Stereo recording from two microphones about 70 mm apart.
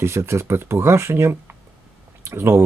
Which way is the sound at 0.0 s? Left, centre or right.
Right.